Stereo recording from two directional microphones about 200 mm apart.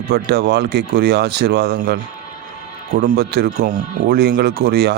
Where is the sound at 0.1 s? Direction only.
50° right (ahead or behind).